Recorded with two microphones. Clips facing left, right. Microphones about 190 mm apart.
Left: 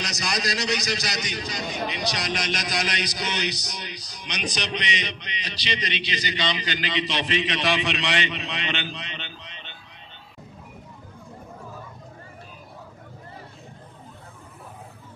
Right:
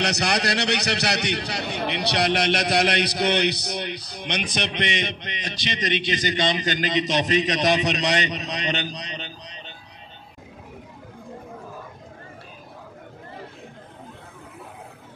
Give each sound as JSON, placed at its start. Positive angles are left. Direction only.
{"t": 0.0, "sound": "a man's voice", "side_deg": -65}